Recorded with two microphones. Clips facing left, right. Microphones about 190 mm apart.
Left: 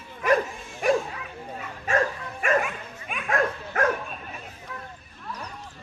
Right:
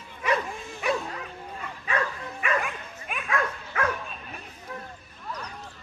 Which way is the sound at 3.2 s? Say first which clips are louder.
Left 4 dB; 45° left (ahead or behind).